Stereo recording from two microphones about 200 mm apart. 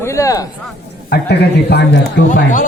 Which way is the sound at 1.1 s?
55° left (ahead or behind).